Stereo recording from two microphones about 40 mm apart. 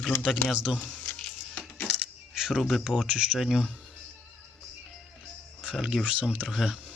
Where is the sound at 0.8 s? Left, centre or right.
Left.